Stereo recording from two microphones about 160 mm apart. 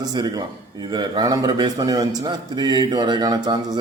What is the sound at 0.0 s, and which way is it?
A man's voice, 25° right (ahead or behind).